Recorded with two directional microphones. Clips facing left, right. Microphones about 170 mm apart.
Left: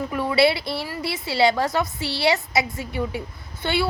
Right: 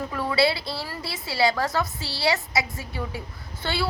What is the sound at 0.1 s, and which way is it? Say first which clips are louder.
A woman's voice: left 4 dB; 20° left (ahead or behind).